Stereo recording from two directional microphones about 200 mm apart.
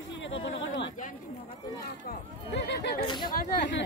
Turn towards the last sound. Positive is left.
turn(degrees=60)  # may be behind; listen again after turning